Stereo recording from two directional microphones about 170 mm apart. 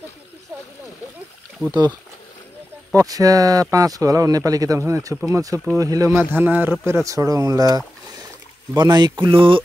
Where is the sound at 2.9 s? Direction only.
20° right (ahead or behind).